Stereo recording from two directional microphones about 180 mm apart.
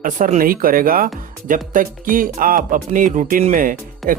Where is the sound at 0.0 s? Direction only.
50° right (ahead or behind).